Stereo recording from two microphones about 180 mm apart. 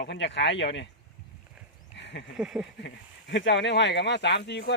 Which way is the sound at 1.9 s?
75° left (ahead or behind).